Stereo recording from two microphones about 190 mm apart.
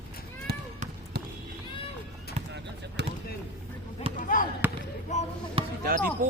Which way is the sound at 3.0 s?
65° right (ahead or behind).